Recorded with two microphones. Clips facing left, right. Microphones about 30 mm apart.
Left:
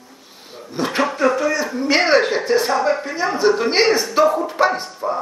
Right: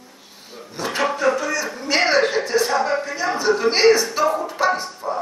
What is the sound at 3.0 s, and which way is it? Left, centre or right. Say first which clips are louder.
Speech: left 2 dB; left.